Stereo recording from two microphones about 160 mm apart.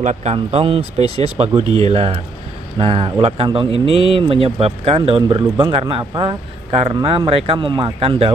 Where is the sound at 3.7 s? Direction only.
90° left.